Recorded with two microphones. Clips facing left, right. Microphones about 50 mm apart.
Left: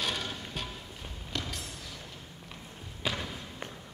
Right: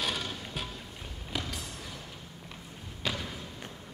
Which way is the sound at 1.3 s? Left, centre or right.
Centre.